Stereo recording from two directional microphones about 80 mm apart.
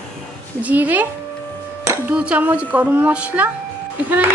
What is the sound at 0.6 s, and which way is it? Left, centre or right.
A woman's voice, right.